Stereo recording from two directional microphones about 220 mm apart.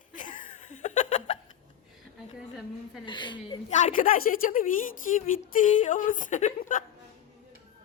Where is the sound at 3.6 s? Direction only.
35° left (ahead or behind).